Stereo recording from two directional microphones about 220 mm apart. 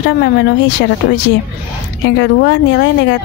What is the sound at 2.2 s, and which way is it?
Speech, 55° left (ahead or behind).